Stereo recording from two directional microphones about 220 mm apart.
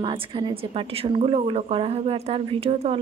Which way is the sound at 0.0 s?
20° right (ahead or behind).